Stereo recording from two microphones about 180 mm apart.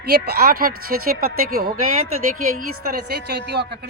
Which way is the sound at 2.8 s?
60° right (ahead or behind).